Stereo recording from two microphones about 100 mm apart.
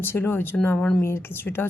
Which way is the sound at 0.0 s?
20° left (ahead or behind).